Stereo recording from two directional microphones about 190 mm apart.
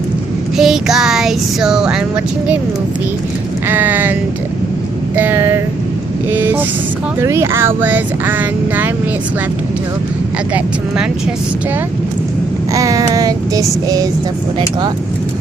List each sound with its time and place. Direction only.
0.5 s music: centre (ahead or behind)
3.7 s speech: 10° right (ahead or behind)
10.5 s music: 5° right (ahead or behind)
12.7 s speech: 15° right (ahead or behind)